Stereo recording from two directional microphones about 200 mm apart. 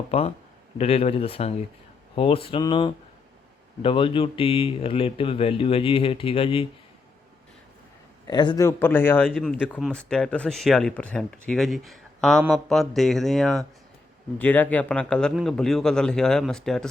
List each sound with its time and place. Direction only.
0.1 s speech: 30° left (ahead or behind)
8.3 s speech: 20° left (ahead or behind); by 16.9 s 5° left (ahead or behind)